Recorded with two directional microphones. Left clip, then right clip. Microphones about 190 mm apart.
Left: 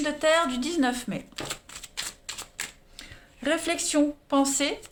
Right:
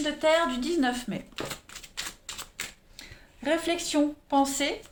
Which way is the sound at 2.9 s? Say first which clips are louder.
Left 2 dB; 30° left (ahead or behind).